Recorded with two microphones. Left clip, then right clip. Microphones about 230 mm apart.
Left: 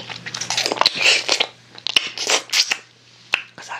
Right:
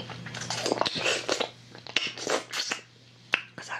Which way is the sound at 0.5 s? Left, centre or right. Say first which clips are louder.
Left 10 dB; centre.